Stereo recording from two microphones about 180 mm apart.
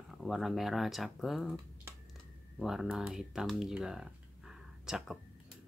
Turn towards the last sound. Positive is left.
turn(degrees=0)  # may be behind; listen again after turning